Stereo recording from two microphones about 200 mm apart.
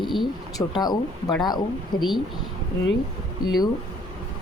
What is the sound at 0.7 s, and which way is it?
Speech, 20° left (ahead or behind).